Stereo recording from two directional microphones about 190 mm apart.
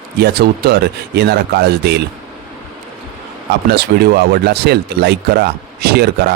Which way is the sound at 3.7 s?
55° right (ahead or behind).